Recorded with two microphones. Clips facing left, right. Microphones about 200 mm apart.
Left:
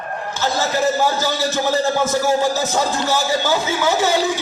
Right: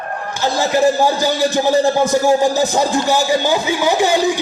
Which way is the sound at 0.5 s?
15° right (ahead or behind).